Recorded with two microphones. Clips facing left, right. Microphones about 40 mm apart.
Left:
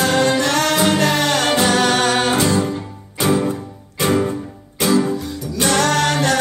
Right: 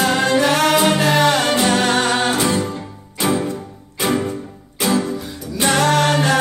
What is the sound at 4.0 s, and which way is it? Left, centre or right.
Music, centre.